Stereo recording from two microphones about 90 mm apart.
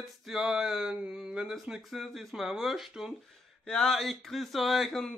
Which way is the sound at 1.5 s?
Centre (ahead or behind).